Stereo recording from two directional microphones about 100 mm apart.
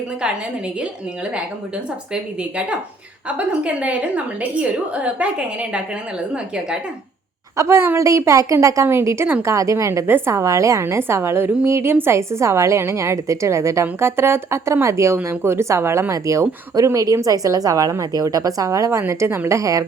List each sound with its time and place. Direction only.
2.4 s a woman's voice: 15° right (ahead or behind)
7.5 s a woman's voice: 30° right (ahead or behind)